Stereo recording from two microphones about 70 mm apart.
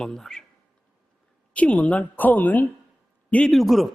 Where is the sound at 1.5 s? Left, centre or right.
Centre.